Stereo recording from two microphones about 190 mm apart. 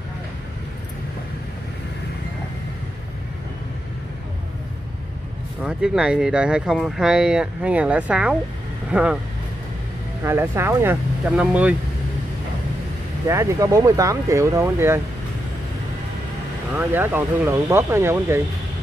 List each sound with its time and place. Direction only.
5.6 s speech: 5° right (ahead or behind)
10.2 s speech: 10° right (ahead or behind)
13.3 s speech: 15° right (ahead or behind)
16.7 s speech: 10° right (ahead or behind)